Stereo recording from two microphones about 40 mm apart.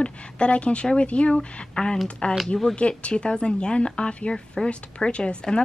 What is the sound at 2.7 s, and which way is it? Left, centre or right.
A woman's voice, left.